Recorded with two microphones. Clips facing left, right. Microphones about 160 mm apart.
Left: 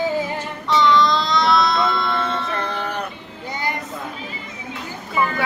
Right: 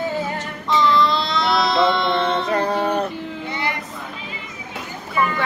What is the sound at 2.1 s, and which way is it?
Music, 30° right (ahead or behind).